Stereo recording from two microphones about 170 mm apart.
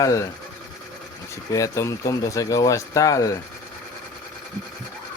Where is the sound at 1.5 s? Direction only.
20° left (ahead or behind).